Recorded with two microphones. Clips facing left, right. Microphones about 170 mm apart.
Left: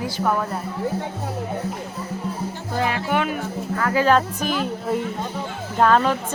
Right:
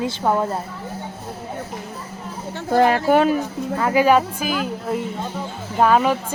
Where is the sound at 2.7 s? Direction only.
50° right (ahead or behind).